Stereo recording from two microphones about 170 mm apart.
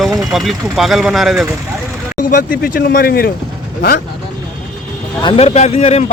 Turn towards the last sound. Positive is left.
turn(degrees=40)  # may be behind; listen again after turning